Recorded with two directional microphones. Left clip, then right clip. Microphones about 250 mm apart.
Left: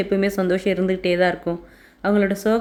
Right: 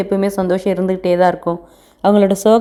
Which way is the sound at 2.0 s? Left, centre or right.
Right.